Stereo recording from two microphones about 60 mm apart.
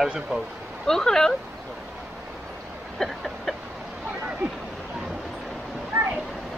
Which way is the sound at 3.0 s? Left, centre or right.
Centre.